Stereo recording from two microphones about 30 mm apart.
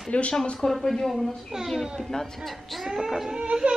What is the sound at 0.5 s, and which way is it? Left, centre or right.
Speech, centre.